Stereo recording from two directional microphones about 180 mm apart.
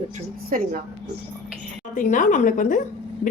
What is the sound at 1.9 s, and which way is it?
Speech, 45° left (ahead or behind).